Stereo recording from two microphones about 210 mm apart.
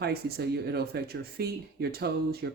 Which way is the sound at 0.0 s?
50° right (ahead or behind).